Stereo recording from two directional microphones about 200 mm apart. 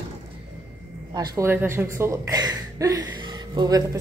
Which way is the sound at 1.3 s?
10° right (ahead or behind).